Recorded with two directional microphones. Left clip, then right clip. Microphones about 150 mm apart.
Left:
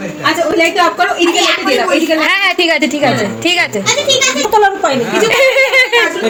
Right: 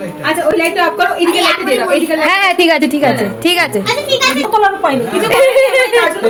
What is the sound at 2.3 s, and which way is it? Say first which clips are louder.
A woman's voice: right 4 dB; 15° right (ahead or behind).